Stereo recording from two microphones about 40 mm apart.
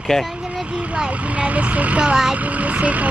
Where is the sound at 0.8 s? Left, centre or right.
Right.